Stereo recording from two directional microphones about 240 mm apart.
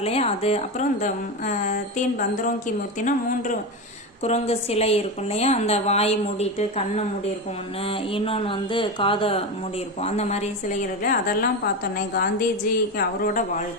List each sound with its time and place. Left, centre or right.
0.0 s a woman's voice: left